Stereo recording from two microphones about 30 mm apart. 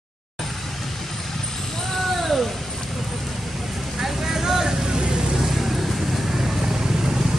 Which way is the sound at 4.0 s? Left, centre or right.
Centre.